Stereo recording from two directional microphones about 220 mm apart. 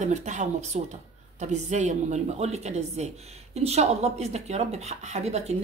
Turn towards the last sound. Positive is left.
turn(degrees=-30)  # may be behind; listen again after turning